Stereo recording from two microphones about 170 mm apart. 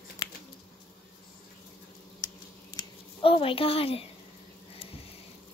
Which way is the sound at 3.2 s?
30° left (ahead or behind).